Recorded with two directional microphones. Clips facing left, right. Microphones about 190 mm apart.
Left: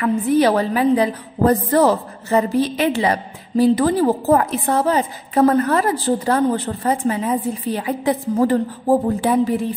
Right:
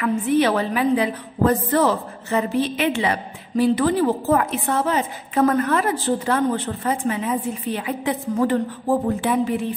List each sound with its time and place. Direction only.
0.0 s a woman's voice: 35° left (ahead or behind)